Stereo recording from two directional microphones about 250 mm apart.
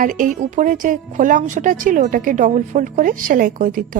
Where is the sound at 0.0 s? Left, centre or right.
Right.